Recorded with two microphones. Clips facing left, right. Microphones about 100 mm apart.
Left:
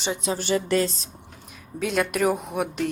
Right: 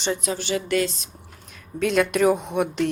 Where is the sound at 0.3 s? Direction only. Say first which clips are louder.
Left 3 dB; 45° left (ahead or behind).